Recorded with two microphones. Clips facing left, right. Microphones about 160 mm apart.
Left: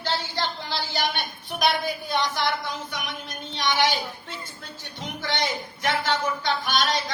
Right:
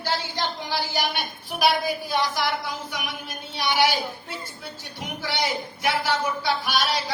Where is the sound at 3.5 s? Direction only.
10° right (ahead or behind).